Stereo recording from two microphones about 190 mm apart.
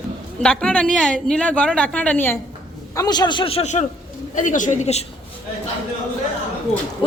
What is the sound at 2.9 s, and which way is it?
A man's voice, 20° left (ahead or behind).